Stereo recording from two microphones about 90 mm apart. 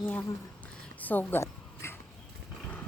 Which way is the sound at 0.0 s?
20° left (ahead or behind).